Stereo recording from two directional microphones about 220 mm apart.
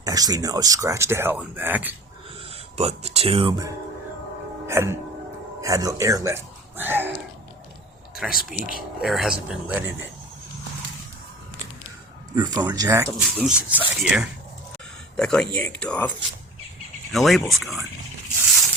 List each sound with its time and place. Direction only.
0.0 s speech: 15° right (ahead or behind)
2.5 s speech: 30° right (ahead or behind)
4.6 s speech: 10° right (ahead or behind)
5.5 s a sound: 15° right (ahead or behind)
8.2 s speech: centre (ahead or behind)
12.3 s speech: 20° right (ahead or behind)
13.1 s speech: 5° right (ahead or behind)